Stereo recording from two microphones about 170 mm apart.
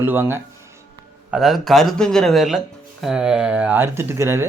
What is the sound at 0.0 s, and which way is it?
Speech, 10° right (ahead or behind).